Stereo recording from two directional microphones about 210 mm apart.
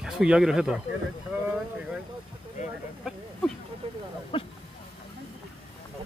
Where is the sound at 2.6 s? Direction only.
35° left (ahead or behind).